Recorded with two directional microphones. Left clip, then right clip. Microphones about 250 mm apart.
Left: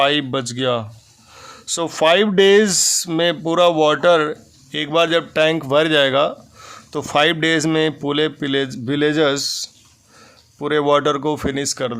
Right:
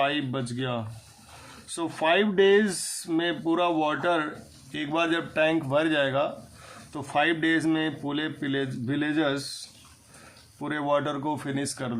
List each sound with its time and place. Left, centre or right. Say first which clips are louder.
0.0 s speech: left 10 dB; left
10.6 s speech: left 10 dB; left